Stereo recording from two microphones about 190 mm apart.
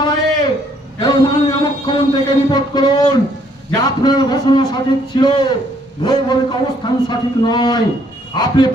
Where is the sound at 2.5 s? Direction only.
20° left (ahead or behind).